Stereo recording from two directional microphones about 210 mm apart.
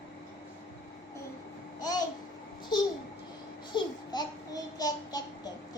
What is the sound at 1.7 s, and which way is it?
Babbling, 20° left (ahead or behind).